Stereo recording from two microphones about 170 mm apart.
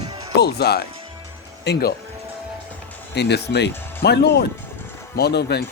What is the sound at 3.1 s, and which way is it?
Speech, 80° left.